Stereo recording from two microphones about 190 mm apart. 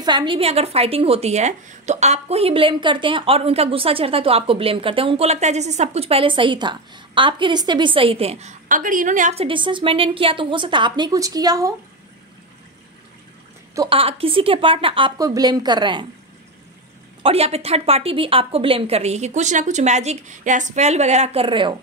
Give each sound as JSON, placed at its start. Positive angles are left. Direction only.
{"t": 0.0, "sound": "a woman's voice", "side_deg": -25}
{"t": 13.7, "sound": "a woman's voice", "side_deg": -30}
{"t": 17.2, "sound": "a woman's voice", "side_deg": -30}